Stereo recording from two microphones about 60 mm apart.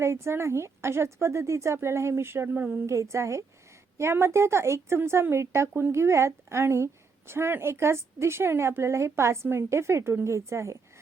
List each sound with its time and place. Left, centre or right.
0.0 s a woman's voice: right
2.8 s a woman's voice: right